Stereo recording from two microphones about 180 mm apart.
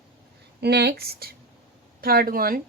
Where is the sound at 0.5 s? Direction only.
65° right (ahead or behind).